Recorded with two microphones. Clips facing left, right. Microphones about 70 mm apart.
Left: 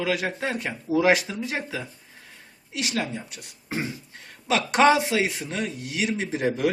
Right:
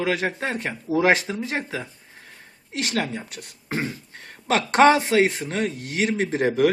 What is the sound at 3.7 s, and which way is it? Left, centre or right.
Beatboxing, right.